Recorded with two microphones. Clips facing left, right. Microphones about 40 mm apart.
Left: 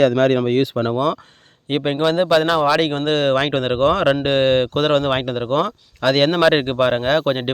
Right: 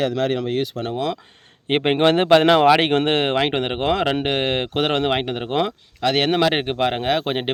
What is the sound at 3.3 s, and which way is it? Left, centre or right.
Speech, centre.